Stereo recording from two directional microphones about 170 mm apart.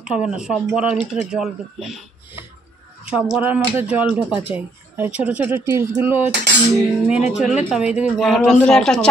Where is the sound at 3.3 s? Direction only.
10° right (ahead or behind).